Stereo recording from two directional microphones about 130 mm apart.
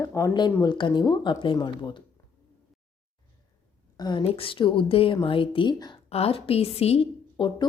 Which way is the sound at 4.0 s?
35° left (ahead or behind).